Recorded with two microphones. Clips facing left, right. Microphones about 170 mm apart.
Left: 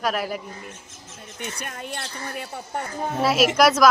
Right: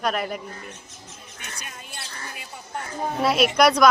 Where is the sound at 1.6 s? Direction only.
60° left (ahead or behind).